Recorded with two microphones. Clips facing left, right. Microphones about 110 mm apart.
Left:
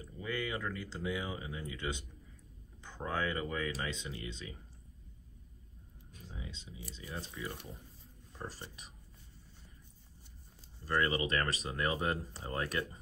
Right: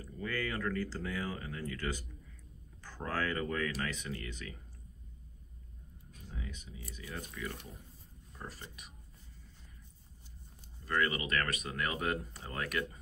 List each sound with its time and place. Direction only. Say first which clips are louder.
0.0 s speech: right 1 dB; 20° left (ahead or behind)
6.3 s speech: right 2 dB; 20° left (ahead or behind)
10.9 s speech: left 1 dB; 30° left (ahead or behind)